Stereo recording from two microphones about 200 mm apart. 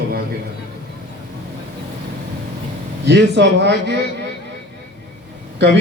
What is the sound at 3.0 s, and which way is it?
Speech, 60° right (ahead or behind).